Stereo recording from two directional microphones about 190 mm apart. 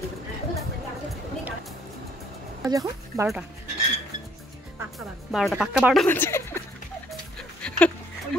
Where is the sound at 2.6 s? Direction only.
15° right (ahead or behind).